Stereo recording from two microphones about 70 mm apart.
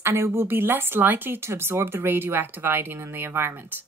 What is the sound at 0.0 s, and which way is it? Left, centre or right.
Speech, right.